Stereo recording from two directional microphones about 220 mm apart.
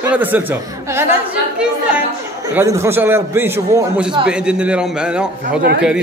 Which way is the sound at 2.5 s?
15° right (ahead or behind).